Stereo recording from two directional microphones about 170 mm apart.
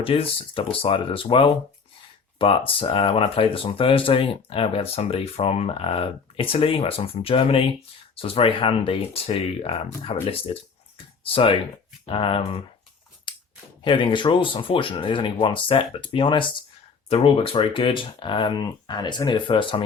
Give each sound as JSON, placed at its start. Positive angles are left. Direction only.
{"t": 0.0, "sound": "speech", "side_deg": 35}
{"t": 13.3, "sound": "a sound", "side_deg": 30}
{"t": 13.8, "sound": "speech", "side_deg": 30}